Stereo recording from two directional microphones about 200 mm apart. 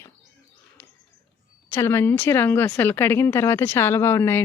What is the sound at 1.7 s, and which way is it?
A woman's voice, 15° left (ahead or behind).